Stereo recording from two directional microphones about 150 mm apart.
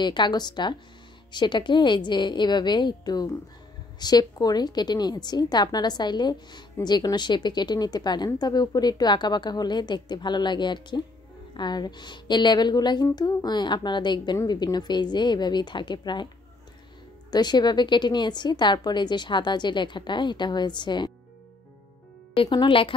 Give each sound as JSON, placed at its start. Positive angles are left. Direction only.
{"t": 0.0, "sound": "a woman's voice", "side_deg": 30}
{"t": 17.3, "sound": "a woman's voice", "side_deg": 30}
{"t": 22.3, "sound": "a woman's voice", "side_deg": 30}